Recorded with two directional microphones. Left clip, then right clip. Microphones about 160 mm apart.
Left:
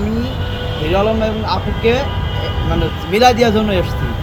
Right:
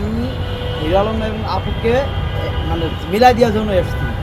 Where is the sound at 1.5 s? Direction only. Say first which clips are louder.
Even; 40° left (ahead or behind).